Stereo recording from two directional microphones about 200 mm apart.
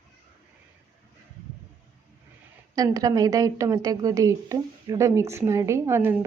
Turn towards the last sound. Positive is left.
turn(degrees=-10)  # may be behind; listen again after turning